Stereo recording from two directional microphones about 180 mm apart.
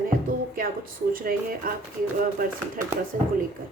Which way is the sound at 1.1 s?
50° right (ahead or behind).